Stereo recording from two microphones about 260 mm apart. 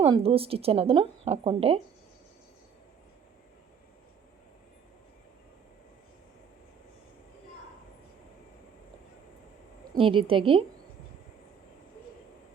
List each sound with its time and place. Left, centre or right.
0.0 s speech: right
9.9 s speech: centre